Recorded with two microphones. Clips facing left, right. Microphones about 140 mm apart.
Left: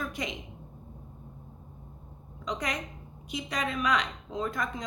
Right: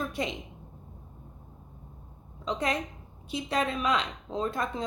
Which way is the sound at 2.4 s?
25° right (ahead or behind).